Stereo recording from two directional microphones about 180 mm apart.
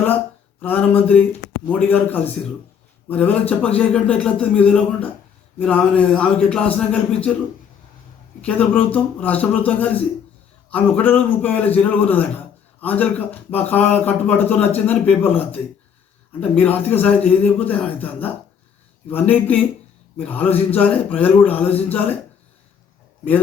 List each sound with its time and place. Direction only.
0.6 s speech: 10° left (ahead or behind)
8.4 s speech: 5° left (ahead or behind)